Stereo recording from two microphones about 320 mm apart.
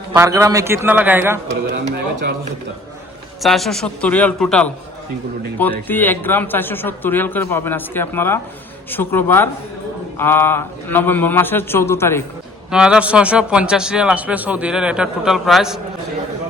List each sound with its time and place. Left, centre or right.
0.1 s a man's voice: centre
1.8 s a man's voice: right
3.4 s speech: centre
12.7 s speech: centre